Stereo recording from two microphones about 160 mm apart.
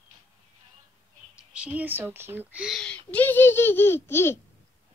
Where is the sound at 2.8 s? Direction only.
5° left (ahead or behind).